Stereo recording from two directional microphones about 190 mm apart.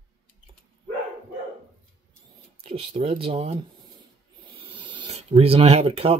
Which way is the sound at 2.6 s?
25° right (ahead or behind).